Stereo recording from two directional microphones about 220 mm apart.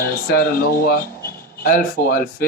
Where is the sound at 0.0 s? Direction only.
45° left (ahead or behind).